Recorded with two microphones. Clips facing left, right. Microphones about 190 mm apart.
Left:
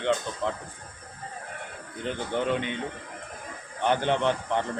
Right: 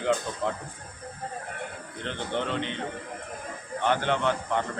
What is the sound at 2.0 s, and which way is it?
Speech, 10° left (ahead or behind).